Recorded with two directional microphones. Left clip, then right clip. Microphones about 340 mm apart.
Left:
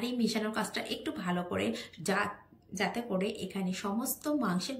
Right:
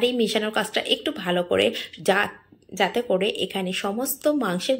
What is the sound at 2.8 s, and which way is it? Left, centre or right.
Speech, centre.